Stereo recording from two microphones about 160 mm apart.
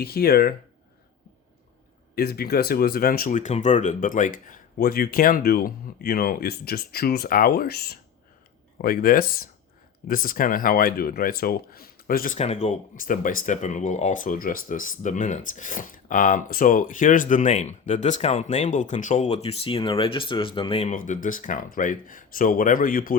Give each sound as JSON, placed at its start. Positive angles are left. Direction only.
{"t": 0.0, "sound": "speech", "side_deg": 75}
{"t": 2.1, "sound": "speech", "side_deg": 75}
{"t": 8.8, "sound": "speech", "side_deg": 65}
{"t": 20.9, "sound": "speech", "side_deg": 55}